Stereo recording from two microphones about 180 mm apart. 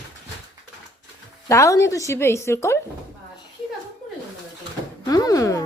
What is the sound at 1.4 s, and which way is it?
Speech, 15° left (ahead or behind).